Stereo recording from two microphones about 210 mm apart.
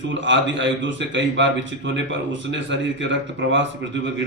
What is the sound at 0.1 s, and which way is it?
A man's voice, 60° right (ahead or behind).